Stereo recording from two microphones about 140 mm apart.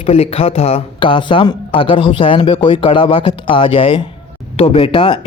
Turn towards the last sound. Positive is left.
turn(degrees=35)  # may be behind; listen again after turning